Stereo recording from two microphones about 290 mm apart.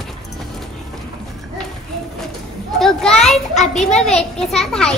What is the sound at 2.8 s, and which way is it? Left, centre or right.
Children playing, centre.